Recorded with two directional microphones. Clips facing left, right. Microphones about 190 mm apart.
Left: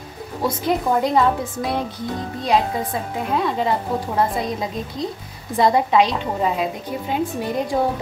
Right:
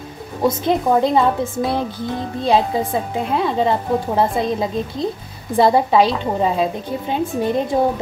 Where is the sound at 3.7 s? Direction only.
25° right (ahead or behind).